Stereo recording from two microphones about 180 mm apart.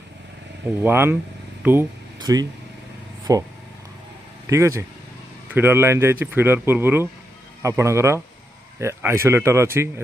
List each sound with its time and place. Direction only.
0.8 s speech: 10° right (ahead or behind)
1.6 s a sound: 10° right (ahead or behind)
3.3 s speech: 20° right (ahead or behind)
4.5 s speech: 15° right (ahead or behind)